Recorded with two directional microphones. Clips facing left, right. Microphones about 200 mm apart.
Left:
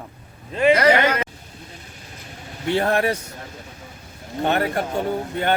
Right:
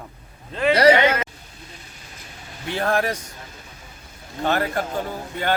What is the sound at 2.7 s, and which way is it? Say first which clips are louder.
Speech: left 2 dB; 25° left (ahead or behind).